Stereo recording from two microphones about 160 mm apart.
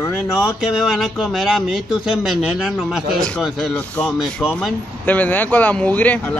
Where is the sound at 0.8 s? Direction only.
Centre (ahead or behind).